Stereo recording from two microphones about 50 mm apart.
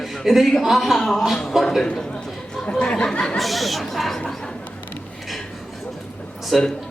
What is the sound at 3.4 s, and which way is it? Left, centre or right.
Speech, centre.